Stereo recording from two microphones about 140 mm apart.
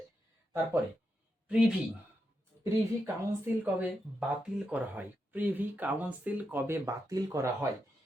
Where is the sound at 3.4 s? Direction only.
10° right (ahead or behind).